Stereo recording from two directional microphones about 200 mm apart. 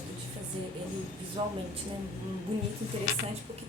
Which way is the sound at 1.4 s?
25° right (ahead or behind).